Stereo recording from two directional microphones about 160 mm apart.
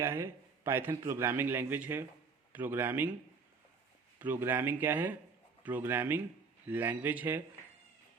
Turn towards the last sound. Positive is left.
turn(degrees=-10)  # may be behind; listen again after turning